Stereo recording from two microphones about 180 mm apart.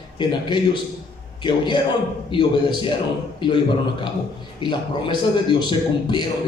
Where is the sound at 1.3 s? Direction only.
25° left (ahead or behind).